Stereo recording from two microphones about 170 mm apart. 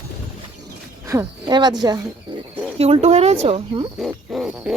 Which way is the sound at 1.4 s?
25° right (ahead or behind).